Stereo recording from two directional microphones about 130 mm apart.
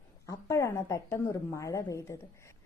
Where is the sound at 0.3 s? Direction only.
25° left (ahead or behind).